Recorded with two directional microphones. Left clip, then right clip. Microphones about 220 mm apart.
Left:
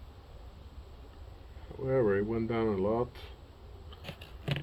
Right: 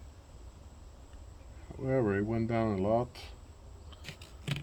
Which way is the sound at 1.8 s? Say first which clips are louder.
Left 2 dB; 60° right (ahead or behind).